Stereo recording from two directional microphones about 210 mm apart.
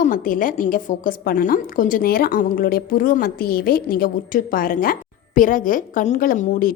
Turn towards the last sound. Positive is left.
turn(degrees=40)  # may be behind; listen again after turning